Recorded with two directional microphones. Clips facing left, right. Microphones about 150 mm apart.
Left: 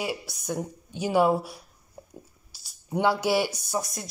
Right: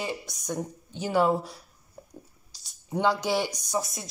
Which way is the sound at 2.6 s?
5° left (ahead or behind).